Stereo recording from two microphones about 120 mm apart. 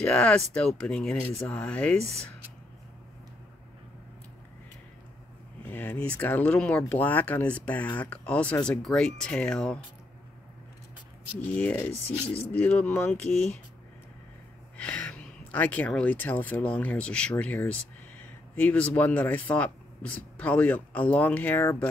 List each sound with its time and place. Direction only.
0.0 s speech: 10° left (ahead or behind)
5.7 s speech: 15° left (ahead or behind)
11.5 s speech: 15° left (ahead or behind)
14.8 s speech: 10° left (ahead or behind)